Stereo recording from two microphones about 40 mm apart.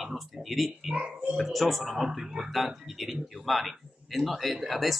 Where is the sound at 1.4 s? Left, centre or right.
Centre.